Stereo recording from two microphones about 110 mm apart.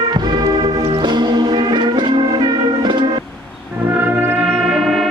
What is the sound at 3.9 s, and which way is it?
Music, 15° right (ahead or behind).